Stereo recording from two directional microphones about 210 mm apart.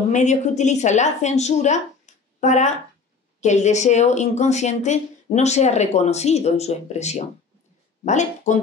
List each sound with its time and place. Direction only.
0.1 s a woman's voice: 35° left (ahead or behind)